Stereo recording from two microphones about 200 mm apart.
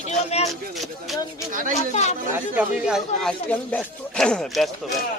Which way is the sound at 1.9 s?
35° left (ahead or behind).